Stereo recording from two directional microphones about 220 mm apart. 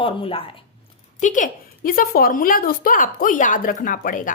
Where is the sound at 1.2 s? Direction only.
35° left (ahead or behind).